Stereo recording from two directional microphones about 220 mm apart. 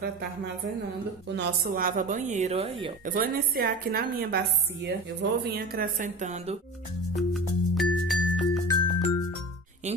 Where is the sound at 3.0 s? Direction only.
40° right (ahead or behind).